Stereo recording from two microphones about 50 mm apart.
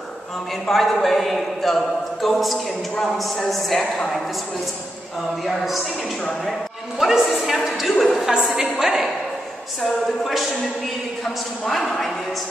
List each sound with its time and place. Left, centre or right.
0.7 s speech: centre
5.5 s speech: centre
7.0 s speech: centre
8.5 s a woman's voice: centre
9.8 s speech: centre
11.6 s speech: centre